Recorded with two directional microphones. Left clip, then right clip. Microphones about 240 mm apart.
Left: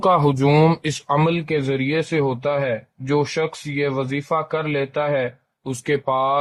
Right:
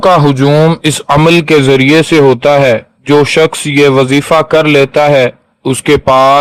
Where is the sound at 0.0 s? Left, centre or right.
Right.